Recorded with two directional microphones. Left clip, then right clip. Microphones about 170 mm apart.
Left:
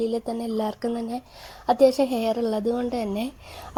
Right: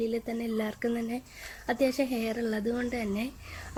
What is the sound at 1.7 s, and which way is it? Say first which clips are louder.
A woman's voice: left 9 dB; 25° left (ahead or behind).